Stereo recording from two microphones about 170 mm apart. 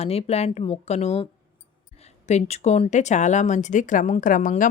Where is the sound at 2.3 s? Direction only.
40° left (ahead or behind).